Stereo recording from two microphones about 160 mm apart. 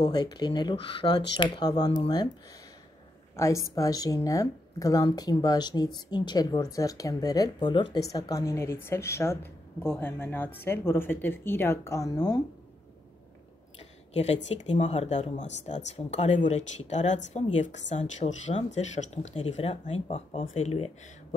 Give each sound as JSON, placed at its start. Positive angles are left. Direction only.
{"t": 0.0, "sound": "speech", "side_deg": 25}
{"t": 3.3, "sound": "a woman's voice", "side_deg": 20}
{"t": 13.7, "sound": "speech", "side_deg": 40}